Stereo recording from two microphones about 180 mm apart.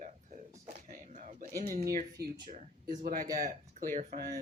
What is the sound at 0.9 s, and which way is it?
Speech, 45° right (ahead or behind).